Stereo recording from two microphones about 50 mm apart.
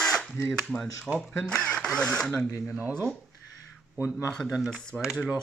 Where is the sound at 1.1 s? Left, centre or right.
Centre.